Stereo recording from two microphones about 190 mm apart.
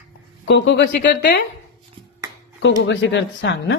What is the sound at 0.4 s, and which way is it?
Speech, 65° left (ahead or behind).